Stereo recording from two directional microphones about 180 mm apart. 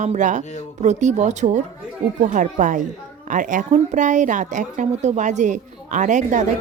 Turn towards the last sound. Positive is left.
turn(degrees=-40)  # may be behind; listen again after turning